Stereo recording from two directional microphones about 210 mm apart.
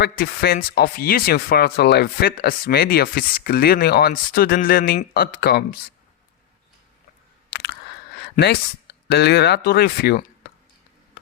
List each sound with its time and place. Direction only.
0.0 s speech: 45° left (ahead or behind)
7.5 s a sound: 50° left (ahead or behind)
8.4 s speech: 35° left (ahead or behind)
9.0 s speech: 50° left (ahead or behind)